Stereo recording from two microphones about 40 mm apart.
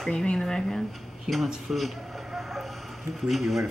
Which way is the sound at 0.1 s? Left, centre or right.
Left.